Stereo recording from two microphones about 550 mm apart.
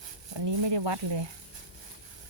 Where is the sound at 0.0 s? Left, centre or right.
Right.